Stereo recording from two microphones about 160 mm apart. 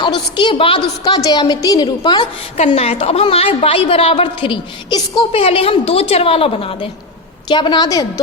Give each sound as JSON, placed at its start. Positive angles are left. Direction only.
{"t": 0.0, "sound": "a woman's voice", "side_deg": 30}
{"t": 2.6, "sound": "a woman's voice", "side_deg": 40}